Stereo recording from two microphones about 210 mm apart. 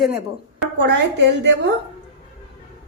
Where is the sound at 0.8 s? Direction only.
55° right (ahead or behind).